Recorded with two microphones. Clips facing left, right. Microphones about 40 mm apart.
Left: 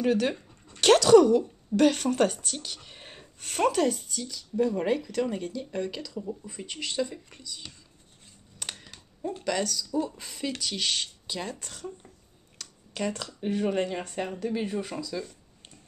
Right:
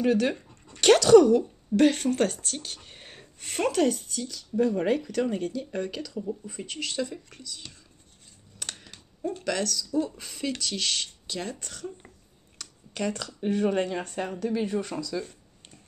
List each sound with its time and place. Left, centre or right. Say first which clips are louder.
0.0 s speech: right 1 dB; centre
1.8 s a woman's voice: right 1 dB; centre
2.0 s speech: left 1 dB; centre
3.3 s speech: even; centre
8.7 s a sound: even; centre
9.2 s speech: even; centre
12.5 s a sound: right 1 dB; centre
13.4 s speech: right 2 dB; centre